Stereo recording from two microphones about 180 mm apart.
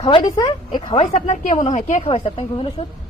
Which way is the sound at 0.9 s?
40° left (ahead or behind).